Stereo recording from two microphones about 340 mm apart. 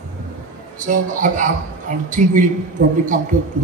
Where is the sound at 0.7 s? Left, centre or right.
Right.